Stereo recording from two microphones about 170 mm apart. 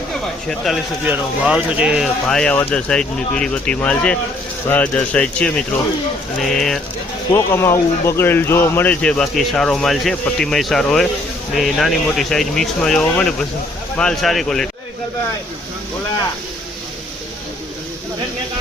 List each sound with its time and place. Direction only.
0.4 s a man's voice: centre (ahead or behind)
2.2 s a man's voice: 5° left (ahead or behind)
7.3 s a man's voice: 15° left (ahead or behind)